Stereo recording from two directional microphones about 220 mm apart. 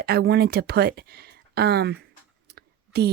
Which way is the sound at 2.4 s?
50° right (ahead or behind).